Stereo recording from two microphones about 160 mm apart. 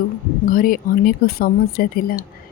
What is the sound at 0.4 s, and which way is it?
A woman's voice, 60° left (ahead or behind).